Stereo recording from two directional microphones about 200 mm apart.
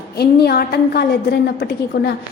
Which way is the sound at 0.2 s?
50° left (ahead or behind).